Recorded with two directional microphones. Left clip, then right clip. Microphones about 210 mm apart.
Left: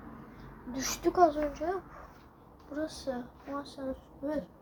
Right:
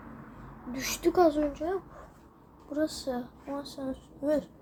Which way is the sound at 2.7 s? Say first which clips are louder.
Right 5 dB; 15° right (ahead or behind).